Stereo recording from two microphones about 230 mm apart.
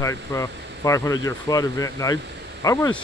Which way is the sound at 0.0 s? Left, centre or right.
Centre.